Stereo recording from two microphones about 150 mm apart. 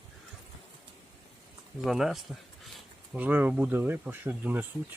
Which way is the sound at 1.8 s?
Centre (ahead or behind).